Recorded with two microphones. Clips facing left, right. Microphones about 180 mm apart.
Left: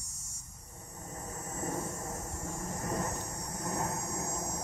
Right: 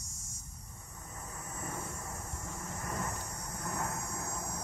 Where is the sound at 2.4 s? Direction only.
40° left (ahead or behind).